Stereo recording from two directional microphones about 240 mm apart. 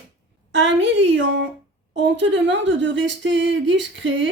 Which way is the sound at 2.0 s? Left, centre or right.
Right.